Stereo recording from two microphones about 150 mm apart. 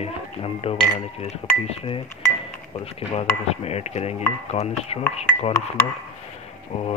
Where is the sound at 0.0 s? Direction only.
40° left (ahead or behind).